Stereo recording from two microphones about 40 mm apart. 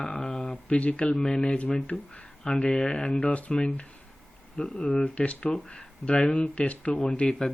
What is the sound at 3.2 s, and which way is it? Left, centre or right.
Speech, left.